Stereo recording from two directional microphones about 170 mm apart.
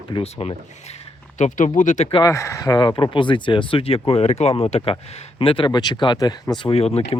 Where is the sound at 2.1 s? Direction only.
20° left (ahead or behind).